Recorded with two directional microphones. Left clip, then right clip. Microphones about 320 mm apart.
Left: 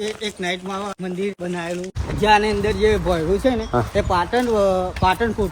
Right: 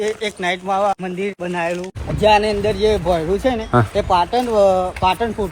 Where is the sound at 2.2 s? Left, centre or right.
Left.